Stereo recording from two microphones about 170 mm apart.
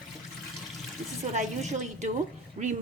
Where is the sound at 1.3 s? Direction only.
45° right (ahead or behind).